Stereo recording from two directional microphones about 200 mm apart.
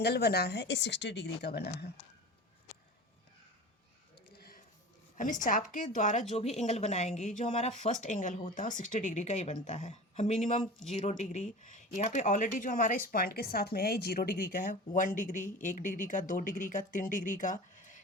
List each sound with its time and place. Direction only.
0.0 s a woman's voice: 55° left (ahead or behind)
4.4 s a sound: 50° left (ahead or behind)
5.1 s speech: 40° left (ahead or behind)